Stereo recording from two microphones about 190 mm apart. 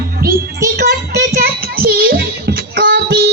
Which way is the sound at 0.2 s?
55° right (ahead or behind).